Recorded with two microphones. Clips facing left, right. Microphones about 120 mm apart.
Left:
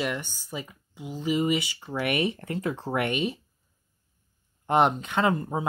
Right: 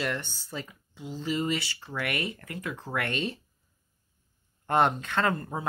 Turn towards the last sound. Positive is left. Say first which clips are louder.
# left 3 dB
turn(degrees=15)  # may be behind; listen again after turning